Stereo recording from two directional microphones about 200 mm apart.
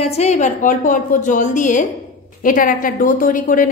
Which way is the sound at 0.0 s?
30° left (ahead or behind).